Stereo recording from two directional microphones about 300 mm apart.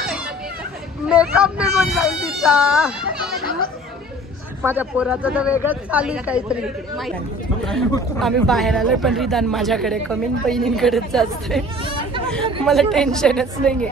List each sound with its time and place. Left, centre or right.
1.0 s a man's voice: centre
4.6 s a man's voice: centre
8.2 s a man's voice: centre
12.6 s a man's voice: centre